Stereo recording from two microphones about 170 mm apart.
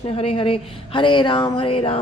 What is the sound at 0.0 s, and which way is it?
Speech, 35° left (ahead or behind).